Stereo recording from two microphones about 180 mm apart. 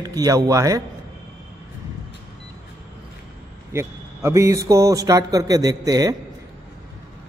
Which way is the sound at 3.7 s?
15° right (ahead or behind).